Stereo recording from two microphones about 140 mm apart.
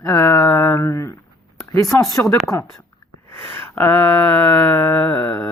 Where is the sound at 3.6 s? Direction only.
15° left (ahead or behind).